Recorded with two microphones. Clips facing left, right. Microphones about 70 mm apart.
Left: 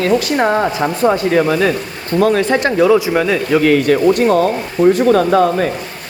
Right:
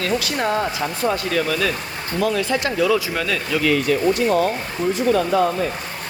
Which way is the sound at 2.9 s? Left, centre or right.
Left.